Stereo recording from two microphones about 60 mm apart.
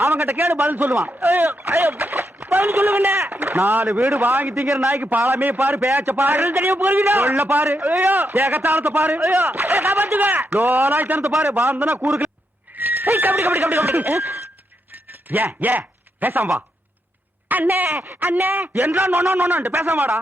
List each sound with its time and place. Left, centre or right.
0.0 s a sound: right
0.3 s a man's voice: right
0.7 s a man's voice: right
1.6 s a man's voice: right
4.4 s a man's voice: right
11.4 s a man's voice: right
12.7 s neigh: right
13.4 s a man's voice: right
17.5 s a man's voice: right